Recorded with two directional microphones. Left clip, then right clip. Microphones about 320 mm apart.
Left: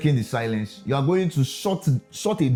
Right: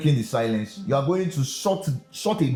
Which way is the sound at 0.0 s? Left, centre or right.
Left.